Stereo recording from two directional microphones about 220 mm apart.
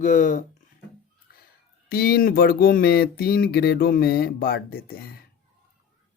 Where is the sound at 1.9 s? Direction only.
45° left (ahead or behind).